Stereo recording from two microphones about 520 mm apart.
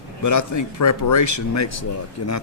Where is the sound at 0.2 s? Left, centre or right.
Left.